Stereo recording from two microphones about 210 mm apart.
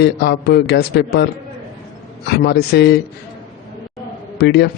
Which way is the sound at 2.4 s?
50° left (ahead or behind).